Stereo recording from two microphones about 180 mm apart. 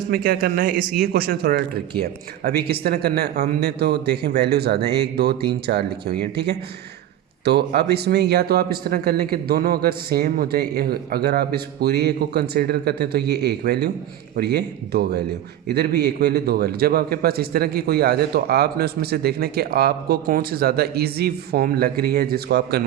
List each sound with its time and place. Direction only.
0.1 s a man's voice: 55° right (ahead or behind)